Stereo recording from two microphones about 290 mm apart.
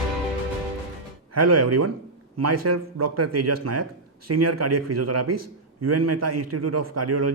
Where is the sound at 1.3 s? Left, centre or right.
Right.